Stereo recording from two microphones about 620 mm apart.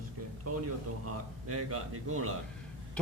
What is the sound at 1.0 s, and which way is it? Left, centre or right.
A man's voice, right.